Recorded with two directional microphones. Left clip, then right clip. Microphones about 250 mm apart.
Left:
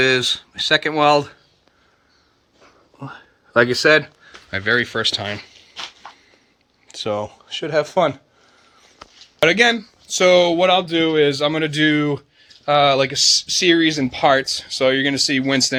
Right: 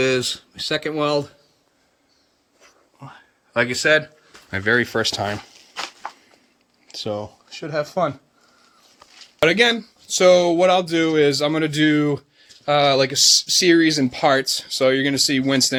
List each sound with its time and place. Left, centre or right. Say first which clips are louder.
0.0 s speech: left 4 dB; centre
3.0 s speech: left 6 dB; left
4.5 s speech: even; centre
9.4 s speech: left 2 dB; centre